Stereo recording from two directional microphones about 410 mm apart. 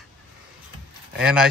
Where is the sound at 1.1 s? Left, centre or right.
Centre.